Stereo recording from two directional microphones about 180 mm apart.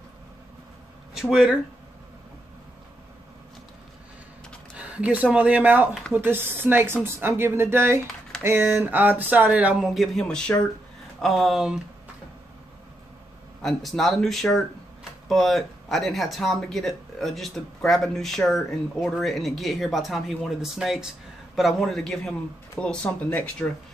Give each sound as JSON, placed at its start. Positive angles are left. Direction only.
{"t": 1.1, "sound": "speech", "side_deg": 0}
{"t": 4.7, "sound": "speech", "side_deg": -5}
{"t": 13.6, "sound": "speech", "side_deg": 0}